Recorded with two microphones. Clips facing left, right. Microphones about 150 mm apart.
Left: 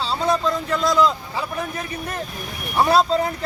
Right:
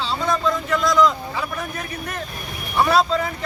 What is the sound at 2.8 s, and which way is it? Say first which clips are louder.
Speech: left 2 dB; 35° left (ahead or behind).